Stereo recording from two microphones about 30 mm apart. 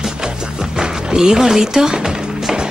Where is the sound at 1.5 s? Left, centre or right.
Centre.